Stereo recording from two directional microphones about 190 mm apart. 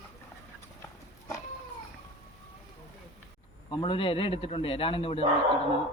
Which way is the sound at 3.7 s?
25° left (ahead or behind).